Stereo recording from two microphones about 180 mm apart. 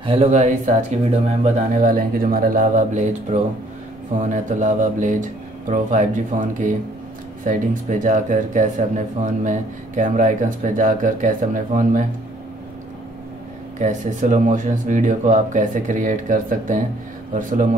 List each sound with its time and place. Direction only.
0.0 s speech: 30° right (ahead or behind)
1.8 s speech: 50° right (ahead or behind)
13.7 s speech: 45° right (ahead or behind)